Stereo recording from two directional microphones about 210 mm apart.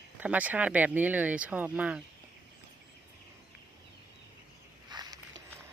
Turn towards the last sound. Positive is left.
turn(degrees=-20)  # may be behind; listen again after turning